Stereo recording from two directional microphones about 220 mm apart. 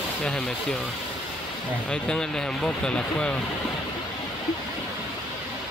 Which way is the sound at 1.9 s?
5° left (ahead or behind).